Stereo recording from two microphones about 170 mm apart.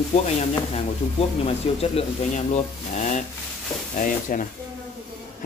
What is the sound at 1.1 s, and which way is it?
Speech, 35° left (ahead or behind).